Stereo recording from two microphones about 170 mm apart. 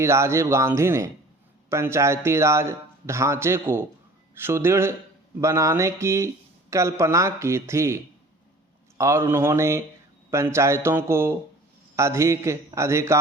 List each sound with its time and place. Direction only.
0.0 s speech: 15° right (ahead or behind)